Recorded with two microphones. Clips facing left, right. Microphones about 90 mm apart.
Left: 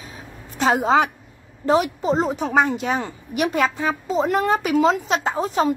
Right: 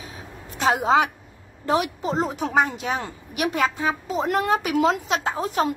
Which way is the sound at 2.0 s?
15° left (ahead or behind).